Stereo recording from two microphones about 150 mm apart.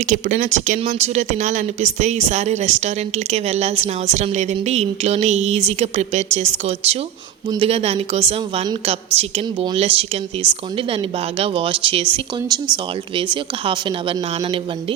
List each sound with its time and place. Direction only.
0.0 s a woman's voice: 55° right (ahead or behind); by 14.9 s 35° right (ahead or behind)